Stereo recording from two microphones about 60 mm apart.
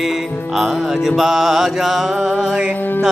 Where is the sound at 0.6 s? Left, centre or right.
Centre.